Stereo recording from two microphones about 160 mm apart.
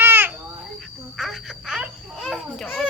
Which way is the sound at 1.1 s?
Centre (ahead or behind).